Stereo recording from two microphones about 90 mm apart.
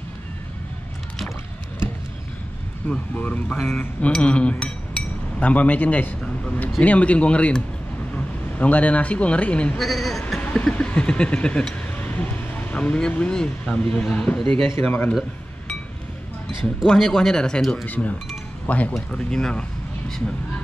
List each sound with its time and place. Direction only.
2.9 s speech: 15° left (ahead or behind)
3.5 s chink: 10° left (ahead or behind)
6.8 s speech: 15° left (ahead or behind)
9.8 s speech: centre (ahead or behind)
16.8 s speech: 5° left (ahead or behind)
17.8 s speech: 20° left (ahead or behind)